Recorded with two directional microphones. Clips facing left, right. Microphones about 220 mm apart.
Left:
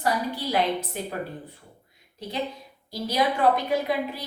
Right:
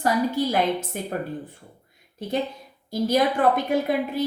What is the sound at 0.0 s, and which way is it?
Speech, 45° right (ahead or behind).